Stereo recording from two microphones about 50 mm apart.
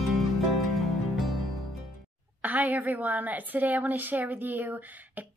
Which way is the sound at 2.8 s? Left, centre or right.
Right.